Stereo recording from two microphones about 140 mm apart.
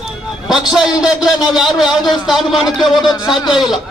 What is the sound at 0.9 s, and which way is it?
A man's voice, 5° right (ahead or behind).